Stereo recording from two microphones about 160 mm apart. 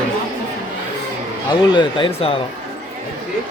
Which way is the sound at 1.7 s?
30° left (ahead or behind).